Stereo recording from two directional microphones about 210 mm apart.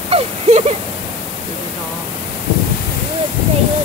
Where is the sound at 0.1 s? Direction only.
30° right (ahead or behind).